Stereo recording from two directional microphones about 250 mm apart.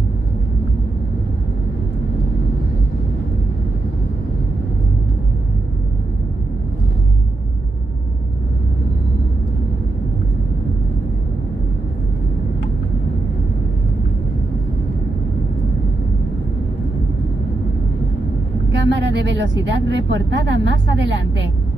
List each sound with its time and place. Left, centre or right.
18.7 s a woman's voice: right